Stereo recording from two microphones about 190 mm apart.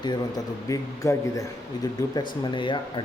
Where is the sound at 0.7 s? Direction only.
15° left (ahead or behind).